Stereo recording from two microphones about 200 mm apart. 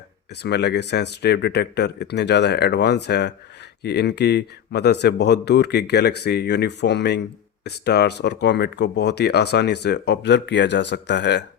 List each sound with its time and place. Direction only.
0.4 s speech: 55° left (ahead or behind)